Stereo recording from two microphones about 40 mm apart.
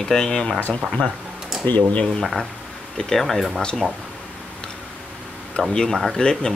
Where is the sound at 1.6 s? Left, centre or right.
Left.